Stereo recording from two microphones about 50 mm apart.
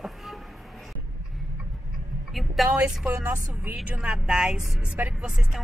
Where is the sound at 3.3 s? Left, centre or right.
Right.